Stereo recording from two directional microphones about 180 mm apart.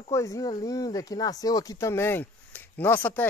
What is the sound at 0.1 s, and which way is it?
Speech, 15° left (ahead or behind).